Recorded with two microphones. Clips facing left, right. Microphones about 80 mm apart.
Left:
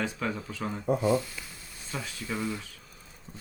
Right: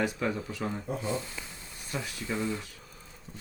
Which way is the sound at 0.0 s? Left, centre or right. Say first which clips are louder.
Right 2 dB; centre.